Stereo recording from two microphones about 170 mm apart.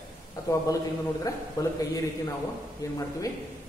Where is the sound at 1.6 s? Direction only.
20° left (ahead or behind).